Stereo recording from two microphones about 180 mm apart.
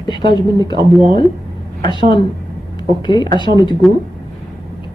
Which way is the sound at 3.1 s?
25° left (ahead or behind).